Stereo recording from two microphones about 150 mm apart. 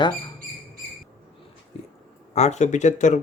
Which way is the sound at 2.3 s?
50° left (ahead or behind).